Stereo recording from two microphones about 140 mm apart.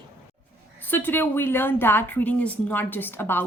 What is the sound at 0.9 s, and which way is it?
A woman's voice, 15° left (ahead or behind).